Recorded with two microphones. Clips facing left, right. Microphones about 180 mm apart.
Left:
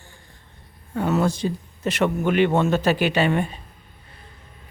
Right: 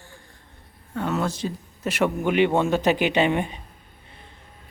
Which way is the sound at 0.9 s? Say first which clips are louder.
Left 4 dB; 10° left (ahead or behind).